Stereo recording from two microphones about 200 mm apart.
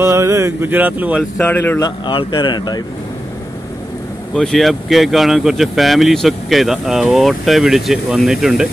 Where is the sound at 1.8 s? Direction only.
20° left (ahead or behind).